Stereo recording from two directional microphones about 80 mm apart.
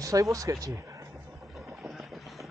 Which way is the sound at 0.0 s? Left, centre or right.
Right.